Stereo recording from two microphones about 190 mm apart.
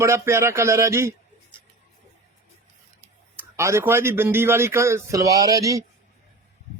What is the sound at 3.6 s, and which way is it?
A man's voice, 15° right (ahead or behind).